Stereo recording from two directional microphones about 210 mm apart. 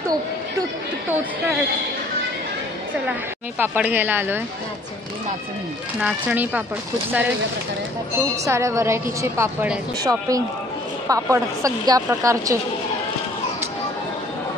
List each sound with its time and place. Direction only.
3.1 s speech: 10° right (ahead or behind)
5.9 s speech: 5° right (ahead or behind)
8.5 s speech: 15° right (ahead or behind)